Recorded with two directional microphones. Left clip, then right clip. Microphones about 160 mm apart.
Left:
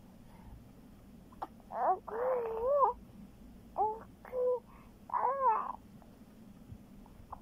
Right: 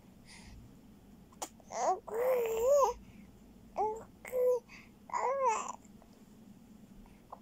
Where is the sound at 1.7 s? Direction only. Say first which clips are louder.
Left 1 dB; 35° right (ahead or behind).